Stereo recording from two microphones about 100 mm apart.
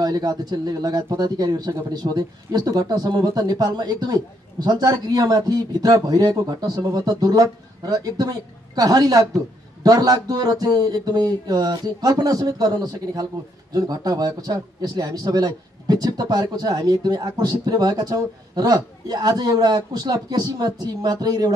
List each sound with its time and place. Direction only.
0.0 s a man's voice: 40° right (ahead or behind)